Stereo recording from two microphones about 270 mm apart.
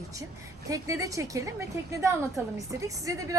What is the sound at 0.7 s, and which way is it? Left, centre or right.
A woman's voice, centre.